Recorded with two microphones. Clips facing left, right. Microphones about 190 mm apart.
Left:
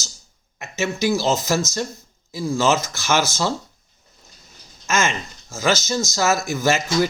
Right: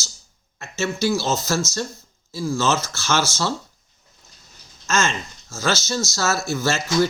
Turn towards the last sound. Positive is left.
turn(degrees=15)  # may be behind; listen again after turning